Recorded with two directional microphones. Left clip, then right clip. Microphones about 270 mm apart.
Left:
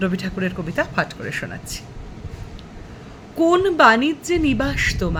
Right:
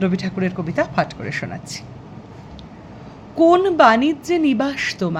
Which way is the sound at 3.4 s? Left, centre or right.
Centre.